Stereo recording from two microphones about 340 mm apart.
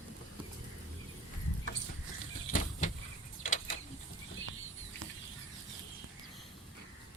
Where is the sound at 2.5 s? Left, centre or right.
Left.